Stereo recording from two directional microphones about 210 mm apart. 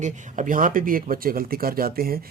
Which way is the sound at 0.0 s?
40° right (ahead or behind).